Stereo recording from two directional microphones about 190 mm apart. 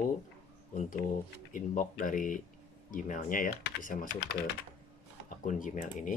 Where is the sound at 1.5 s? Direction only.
45° left (ahead or behind).